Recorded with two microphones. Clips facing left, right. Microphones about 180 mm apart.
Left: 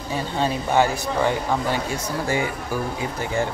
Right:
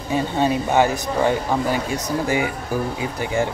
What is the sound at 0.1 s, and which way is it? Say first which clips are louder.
Speech: right 4 dB; 20° right (ahead or behind).